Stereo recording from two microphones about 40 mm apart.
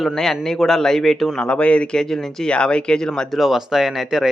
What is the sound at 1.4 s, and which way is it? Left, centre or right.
Speech, left.